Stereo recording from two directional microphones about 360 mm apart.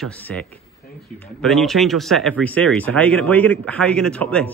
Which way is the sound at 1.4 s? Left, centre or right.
Centre.